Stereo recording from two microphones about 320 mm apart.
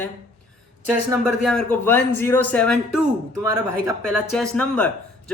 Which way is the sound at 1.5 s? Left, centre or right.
Centre.